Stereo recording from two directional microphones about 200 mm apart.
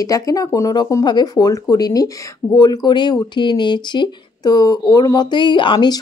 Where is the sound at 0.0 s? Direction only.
15° left (ahead or behind).